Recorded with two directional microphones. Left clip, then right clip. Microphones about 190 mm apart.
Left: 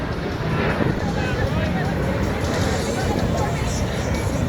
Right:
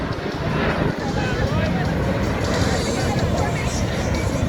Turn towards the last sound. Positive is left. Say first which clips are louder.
# even
turn(degrees=30)  # may be behind; listen again after turning